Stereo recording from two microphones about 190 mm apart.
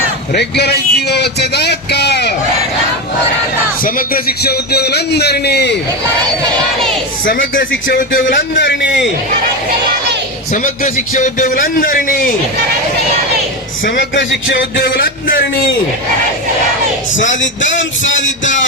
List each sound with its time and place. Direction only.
0.3 s speech: 60° left (ahead or behind)
3.8 s speech: 50° left (ahead or behind)
7.9 s a man's voice: 45° left (ahead or behind)
8.7 s speech: 70° left (ahead or behind)
10.5 s a man's voice: 40° left (ahead or behind)
13.8 s speech: 70° left (ahead or behind); by 15.6 s 55° left (ahead or behind)
17.2 s speech: 75° left (ahead or behind)